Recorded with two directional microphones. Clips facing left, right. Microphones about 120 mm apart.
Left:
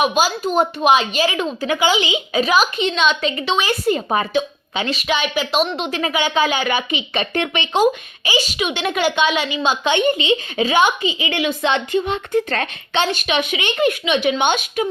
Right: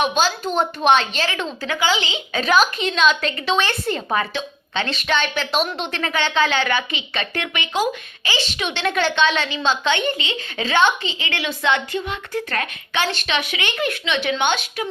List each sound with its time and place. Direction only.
0.0 s a woman's voice: 10° left (ahead or behind)